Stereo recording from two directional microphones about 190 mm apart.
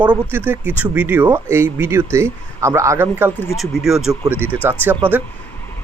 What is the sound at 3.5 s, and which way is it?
Speech, centre (ahead or behind).